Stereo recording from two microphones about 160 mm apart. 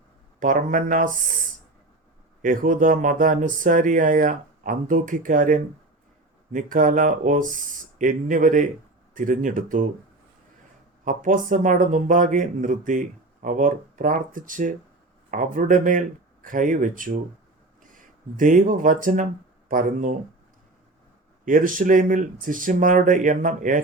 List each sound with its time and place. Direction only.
0.3 s a man's voice: 55° right (ahead or behind)
2.4 s a man's voice: 55° right (ahead or behind)
11.0 s a man's voice: 55° right (ahead or behind)
21.4 s a man's voice: 55° right (ahead or behind)